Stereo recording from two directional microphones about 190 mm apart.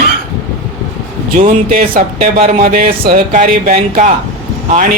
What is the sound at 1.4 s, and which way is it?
Speech, 45° right (ahead or behind).